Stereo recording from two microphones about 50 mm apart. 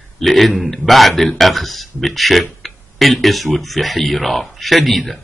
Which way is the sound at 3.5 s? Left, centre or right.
Centre.